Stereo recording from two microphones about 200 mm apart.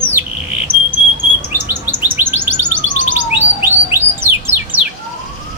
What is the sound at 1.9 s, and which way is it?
Chirp, 10° right (ahead or behind).